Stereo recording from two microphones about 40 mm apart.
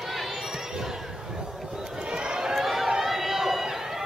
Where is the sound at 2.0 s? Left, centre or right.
Right.